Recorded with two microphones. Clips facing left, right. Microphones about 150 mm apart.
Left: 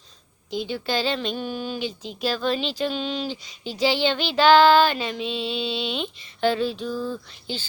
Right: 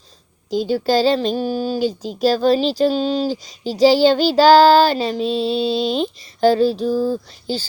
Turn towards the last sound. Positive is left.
turn(degrees=-40)  # may be behind; listen again after turning